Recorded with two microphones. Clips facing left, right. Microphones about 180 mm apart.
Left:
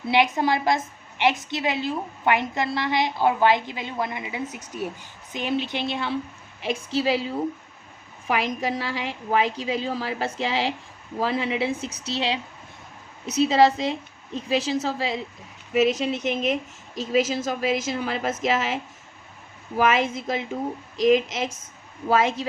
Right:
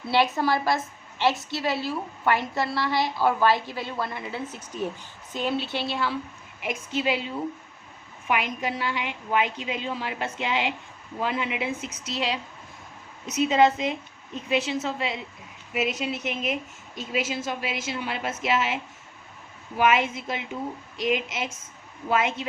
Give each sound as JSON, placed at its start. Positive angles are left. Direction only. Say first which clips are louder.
{"t": 0.1, "sound": "a woman's voice", "louder": "left 2 dB", "side_deg": 15}
{"t": 6.6, "sound": "a woman's voice", "louder": "left 4 dB", "side_deg": 30}